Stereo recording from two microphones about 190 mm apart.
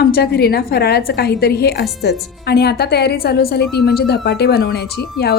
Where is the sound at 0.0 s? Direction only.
55° left (ahead or behind).